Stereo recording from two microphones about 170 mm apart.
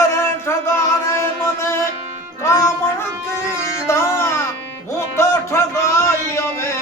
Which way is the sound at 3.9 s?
15° left (ahead or behind).